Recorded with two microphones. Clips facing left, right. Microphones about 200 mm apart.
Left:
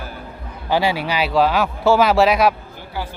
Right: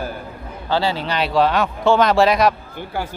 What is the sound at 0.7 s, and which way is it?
Speech, 15° left (ahead or behind).